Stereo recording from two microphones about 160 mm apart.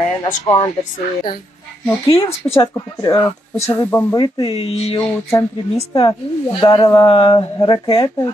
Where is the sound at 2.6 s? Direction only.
20° left (ahead or behind).